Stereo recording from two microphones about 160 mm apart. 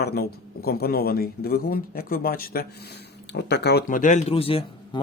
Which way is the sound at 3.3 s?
90° left.